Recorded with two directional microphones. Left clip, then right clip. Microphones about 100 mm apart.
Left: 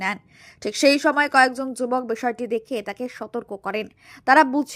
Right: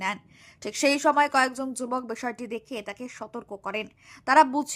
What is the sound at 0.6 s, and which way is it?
Speech, 40° left (ahead or behind).